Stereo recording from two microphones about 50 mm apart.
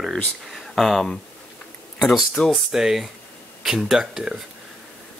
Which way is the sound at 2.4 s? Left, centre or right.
Left.